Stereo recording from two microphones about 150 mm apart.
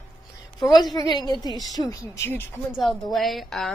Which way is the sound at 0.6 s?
30° left (ahead or behind).